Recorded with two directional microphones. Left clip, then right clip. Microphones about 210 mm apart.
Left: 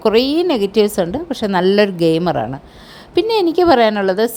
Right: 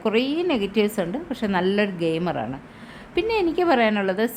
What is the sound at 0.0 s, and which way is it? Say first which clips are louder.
A woman's voice: left 9 dB; 30° left (ahead or behind).